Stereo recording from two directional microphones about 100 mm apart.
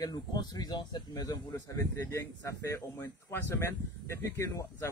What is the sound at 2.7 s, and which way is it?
Speech, 20° left (ahead or behind).